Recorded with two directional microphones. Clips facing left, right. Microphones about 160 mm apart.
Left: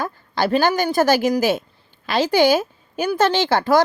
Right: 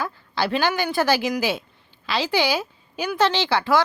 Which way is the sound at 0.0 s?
45° left (ahead or behind).